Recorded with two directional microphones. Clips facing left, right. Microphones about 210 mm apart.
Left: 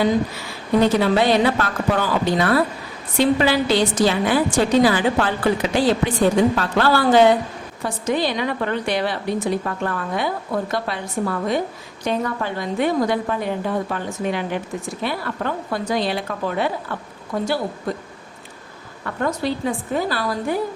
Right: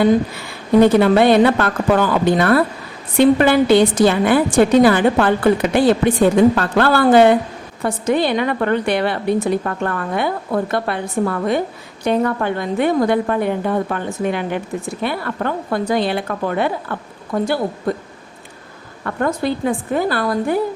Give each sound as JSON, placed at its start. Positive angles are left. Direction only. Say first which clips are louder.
{"t": 0.8, "sound": "a woman's voice", "louder": "right 6 dB", "side_deg": -55}
{"t": 19.0, "sound": "a woman's voice", "louder": "right 3 dB", "side_deg": -55}